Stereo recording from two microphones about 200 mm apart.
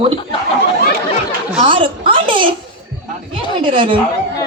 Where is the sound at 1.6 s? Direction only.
25° right (ahead or behind).